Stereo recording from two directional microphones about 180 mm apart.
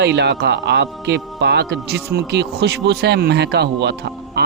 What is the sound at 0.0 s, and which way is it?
Speech, 70° right (ahead or behind).